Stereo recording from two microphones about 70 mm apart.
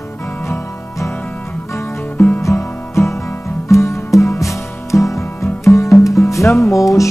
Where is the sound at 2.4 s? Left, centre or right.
Left.